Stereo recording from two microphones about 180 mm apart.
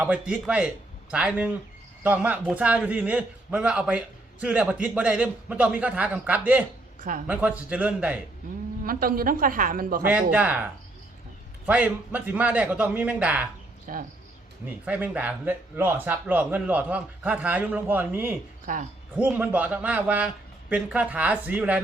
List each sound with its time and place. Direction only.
0.0 s a man's voice: 10° right (ahead or behind)
8.8 s a woman's voice: 55° right (ahead or behind)
10.0 s a man's voice: 10° right (ahead or behind)
13.9 s a woman's voice: 45° right (ahead or behind)
14.8 s a man's voice: 10° right (ahead or behind)
18.6 s speech: 45° right (ahead or behind)
19.1 s a man's voice: 10° right (ahead or behind)